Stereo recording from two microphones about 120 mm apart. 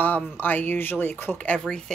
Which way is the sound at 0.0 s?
15° left (ahead or behind).